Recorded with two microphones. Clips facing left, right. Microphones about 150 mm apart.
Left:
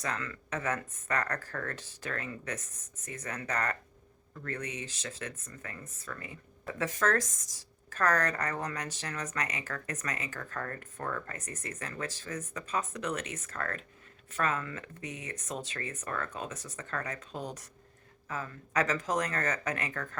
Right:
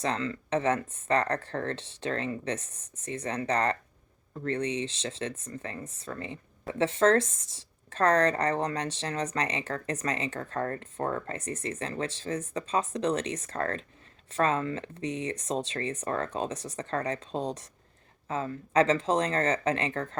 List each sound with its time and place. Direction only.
0.0 s speech: 25° right (ahead or behind)